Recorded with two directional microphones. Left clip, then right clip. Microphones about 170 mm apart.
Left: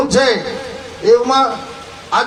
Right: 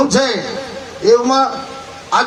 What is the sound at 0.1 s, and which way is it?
A man's voice, 35° right (ahead or behind).